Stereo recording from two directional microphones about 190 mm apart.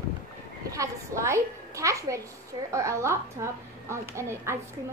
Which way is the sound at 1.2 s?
15° right (ahead or behind).